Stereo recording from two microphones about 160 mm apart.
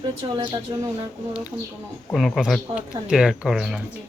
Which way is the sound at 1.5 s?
10° right (ahead or behind).